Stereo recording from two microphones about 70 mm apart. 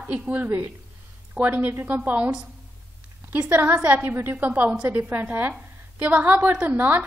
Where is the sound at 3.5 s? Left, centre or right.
Right.